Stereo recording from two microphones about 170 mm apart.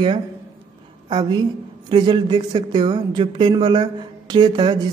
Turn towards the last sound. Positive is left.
turn(degrees=-25)  # may be behind; listen again after turning